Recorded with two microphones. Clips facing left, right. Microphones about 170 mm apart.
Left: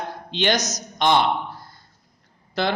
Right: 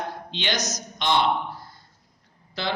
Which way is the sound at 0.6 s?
20° left (ahead or behind).